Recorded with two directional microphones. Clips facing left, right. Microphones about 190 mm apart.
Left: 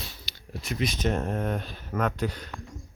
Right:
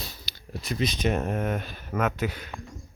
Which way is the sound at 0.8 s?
10° right (ahead or behind).